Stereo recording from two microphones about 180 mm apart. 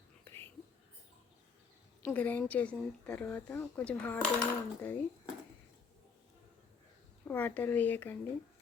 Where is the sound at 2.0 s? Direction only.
10° left (ahead or behind).